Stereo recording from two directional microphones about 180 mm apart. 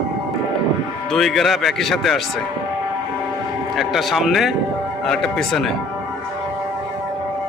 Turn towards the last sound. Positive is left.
turn(degrees=0)  # may be behind; listen again after turning